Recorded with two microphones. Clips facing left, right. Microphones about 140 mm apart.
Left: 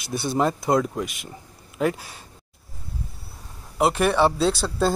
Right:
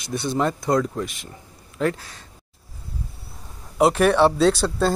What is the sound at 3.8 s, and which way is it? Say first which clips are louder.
Speech: right 3 dB; 5° left (ahead or behind).